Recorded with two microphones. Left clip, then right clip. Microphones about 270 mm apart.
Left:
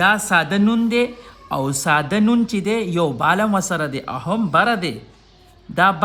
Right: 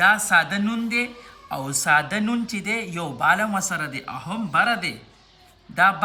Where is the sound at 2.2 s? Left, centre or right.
Centre.